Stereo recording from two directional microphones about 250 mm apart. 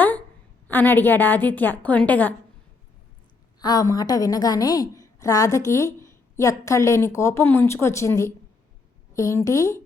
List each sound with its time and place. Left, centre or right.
0.7 s a woman's voice: centre
3.6 s a woman's voice: centre